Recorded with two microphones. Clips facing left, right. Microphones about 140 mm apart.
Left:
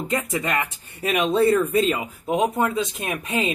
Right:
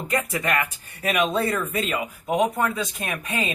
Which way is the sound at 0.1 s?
20° left (ahead or behind).